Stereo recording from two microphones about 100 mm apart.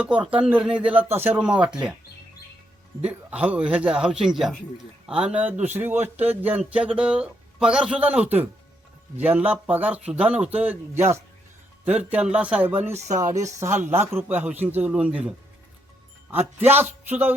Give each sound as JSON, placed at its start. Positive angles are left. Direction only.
{"t": 0.0, "sound": "speech", "side_deg": -10}
{"t": 1.4, "sound": "speech", "side_deg": -10}
{"t": 3.0, "sound": "speech", "side_deg": -10}
{"t": 11.9, "sound": "speech", "side_deg": -15}
{"t": 13.3, "sound": "a man's voice", "side_deg": -25}
{"t": 16.6, "sound": "a man's voice", "side_deg": -20}